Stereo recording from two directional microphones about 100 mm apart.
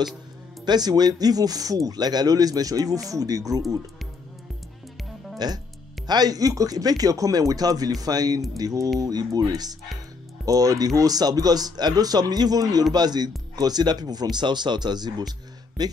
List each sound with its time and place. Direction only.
0.7 s speech: 45° right (ahead or behind)
5.4 s speech: 45° right (ahead or behind)